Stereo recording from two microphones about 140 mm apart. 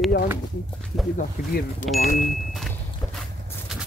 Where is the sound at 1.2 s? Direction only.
70° left (ahead or behind).